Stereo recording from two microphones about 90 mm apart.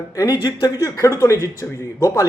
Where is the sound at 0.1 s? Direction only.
45° left (ahead or behind).